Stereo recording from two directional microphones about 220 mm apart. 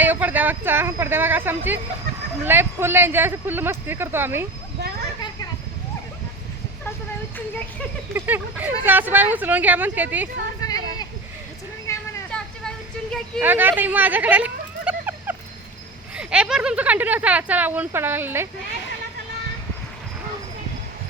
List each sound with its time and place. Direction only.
0.0 s speech: 10° right (ahead or behind)
8.1 s speech: 10° right (ahead or behind)
10.7 s a sound: 15° left (ahead or behind)
11.9 s vehicle: 5° left (ahead or behind)
13.4 s a sound: 10° right (ahead or behind)
16.1 s speech: 5° right (ahead or behind)